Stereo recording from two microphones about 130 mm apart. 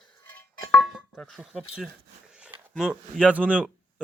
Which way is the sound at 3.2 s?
10° right (ahead or behind).